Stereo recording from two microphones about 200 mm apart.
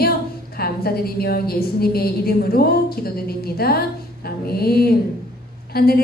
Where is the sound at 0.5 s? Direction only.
50° left (ahead or behind).